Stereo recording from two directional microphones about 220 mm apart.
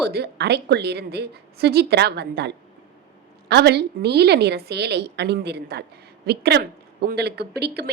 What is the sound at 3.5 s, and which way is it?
A woman's voice, 50° right (ahead or behind).